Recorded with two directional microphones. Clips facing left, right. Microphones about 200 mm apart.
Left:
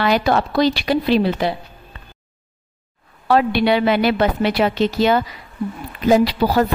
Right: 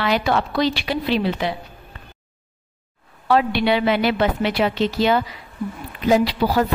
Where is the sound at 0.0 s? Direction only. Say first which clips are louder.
Left 3 dB; 40° left (ahead or behind).